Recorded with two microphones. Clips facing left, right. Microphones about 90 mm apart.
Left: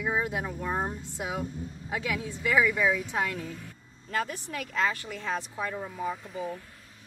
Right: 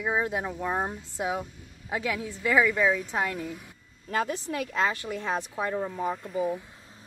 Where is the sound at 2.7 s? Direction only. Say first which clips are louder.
Right 2 dB; centre (ahead or behind).